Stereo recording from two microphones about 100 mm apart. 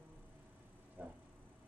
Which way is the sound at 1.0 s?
20° right (ahead or behind).